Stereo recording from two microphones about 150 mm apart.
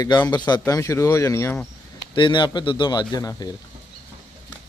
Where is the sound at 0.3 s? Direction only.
30° left (ahead or behind).